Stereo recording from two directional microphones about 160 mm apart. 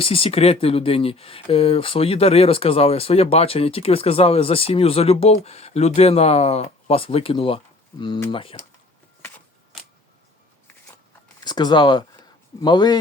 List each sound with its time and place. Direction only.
0.0 s speech: 35° left (ahead or behind)
11.4 s speech: 25° left (ahead or behind)